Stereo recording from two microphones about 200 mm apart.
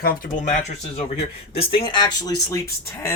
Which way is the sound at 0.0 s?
45° left (ahead or behind).